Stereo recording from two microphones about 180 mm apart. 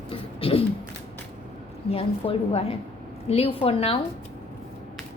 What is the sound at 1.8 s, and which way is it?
A woman's voice, 30° left (ahead or behind).